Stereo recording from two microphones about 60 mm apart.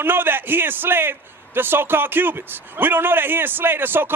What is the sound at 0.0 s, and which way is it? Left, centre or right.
A man's voice, right.